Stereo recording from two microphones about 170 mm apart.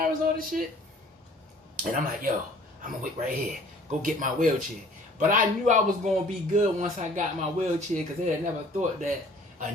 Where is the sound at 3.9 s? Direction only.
50° right (ahead or behind).